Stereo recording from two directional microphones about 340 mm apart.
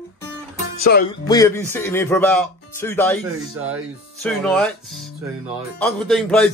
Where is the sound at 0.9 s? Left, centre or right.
Left.